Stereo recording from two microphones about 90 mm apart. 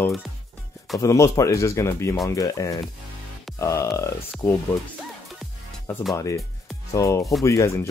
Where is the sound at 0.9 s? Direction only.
35° left (ahead or behind).